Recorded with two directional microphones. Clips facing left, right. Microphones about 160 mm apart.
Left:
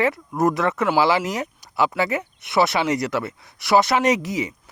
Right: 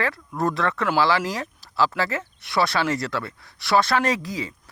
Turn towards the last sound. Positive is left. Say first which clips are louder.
# left 5 dB
turn(degrees=20)  # may be behind; listen again after turning